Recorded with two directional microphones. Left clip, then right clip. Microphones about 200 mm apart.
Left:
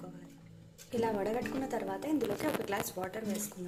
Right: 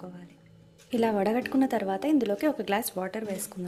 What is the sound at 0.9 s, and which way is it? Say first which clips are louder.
Speech: right 7 dB; 35° right (ahead or behind).